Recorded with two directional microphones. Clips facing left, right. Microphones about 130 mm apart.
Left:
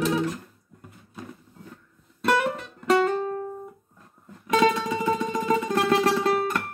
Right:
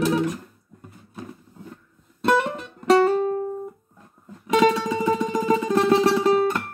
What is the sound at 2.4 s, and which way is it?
Music, 30° right (ahead or behind).